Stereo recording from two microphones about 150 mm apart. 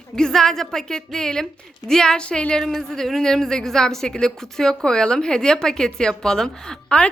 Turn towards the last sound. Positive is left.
turn(degrees=5)  # may be behind; listen again after turning